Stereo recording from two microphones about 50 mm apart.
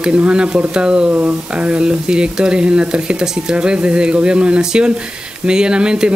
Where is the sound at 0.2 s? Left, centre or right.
Right.